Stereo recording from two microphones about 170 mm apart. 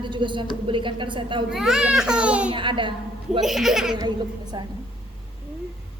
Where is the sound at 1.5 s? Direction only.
Centre (ahead or behind).